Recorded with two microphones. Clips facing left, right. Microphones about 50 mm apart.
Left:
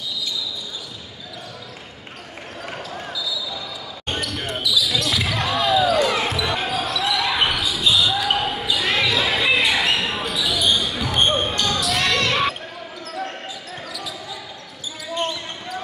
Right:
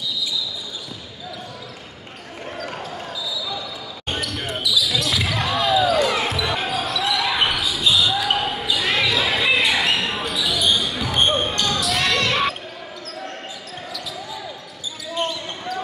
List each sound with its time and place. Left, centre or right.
4.1 s basketball bounce: centre
15.1 s basketball bounce: centre